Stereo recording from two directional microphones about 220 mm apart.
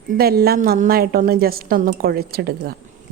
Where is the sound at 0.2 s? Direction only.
45° right (ahead or behind).